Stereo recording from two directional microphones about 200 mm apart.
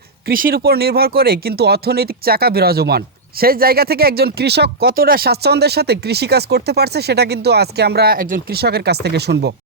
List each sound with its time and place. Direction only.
0.3 s speech: 45° right (ahead or behind)